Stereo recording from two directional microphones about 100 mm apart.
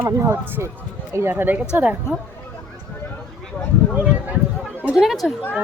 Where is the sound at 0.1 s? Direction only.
30° right (ahead or behind).